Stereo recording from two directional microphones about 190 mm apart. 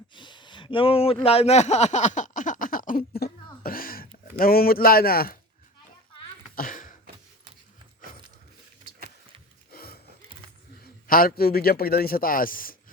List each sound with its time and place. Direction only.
0.1 s speech: 25° left (ahead or behind); by 3.0 s 45° left (ahead or behind)
3.2 s cough: 55° left (ahead or behind)
3.6 s a sound: 50° left (ahead or behind)
6.6 s a sound: 45° left (ahead or behind)
9.7 s gasp: 55° left (ahead or behind)
11.1 s a man's voice: 50° left (ahead or behind)